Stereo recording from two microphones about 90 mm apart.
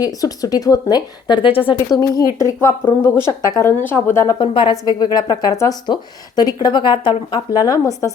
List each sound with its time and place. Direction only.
0.0 s speech: 45° left (ahead or behind)
1.5 s speech: 80° left
2.0 s speech: 35° left (ahead or behind)
4.4 s a woman's voice: 70° left (ahead or behind)
4.7 s speech: 50° left (ahead or behind)
5.8 s speech: 50° left (ahead or behind)